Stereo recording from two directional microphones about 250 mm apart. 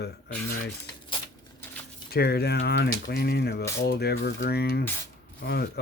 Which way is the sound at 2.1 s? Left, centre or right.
Left.